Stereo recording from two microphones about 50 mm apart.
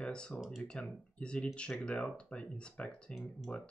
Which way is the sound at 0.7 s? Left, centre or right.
Left.